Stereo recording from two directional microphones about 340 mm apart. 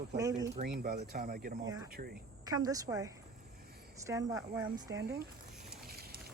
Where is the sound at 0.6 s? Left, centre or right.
Right.